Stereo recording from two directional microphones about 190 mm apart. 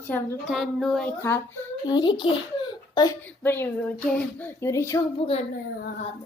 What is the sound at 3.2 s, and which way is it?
A woman's voice, 10° left (ahead or behind).